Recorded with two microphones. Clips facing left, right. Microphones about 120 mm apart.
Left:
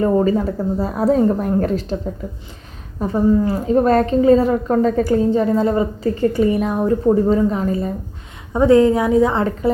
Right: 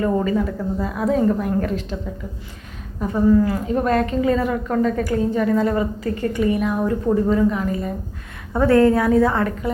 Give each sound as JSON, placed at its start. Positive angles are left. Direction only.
{"t": 0.0, "sound": "a woman's voice", "side_deg": 30}
{"t": 3.0, "sound": "a woman's voice", "side_deg": 30}
{"t": 8.5, "sound": "a woman's voice", "side_deg": 15}